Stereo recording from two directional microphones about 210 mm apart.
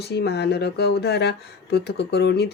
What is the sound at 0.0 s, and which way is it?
Speech, 50° left (ahead or behind).